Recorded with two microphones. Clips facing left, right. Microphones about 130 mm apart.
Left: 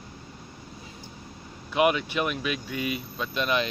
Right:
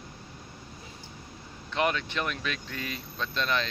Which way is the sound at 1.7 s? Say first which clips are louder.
Left 5 dB; 10° left (ahead or behind).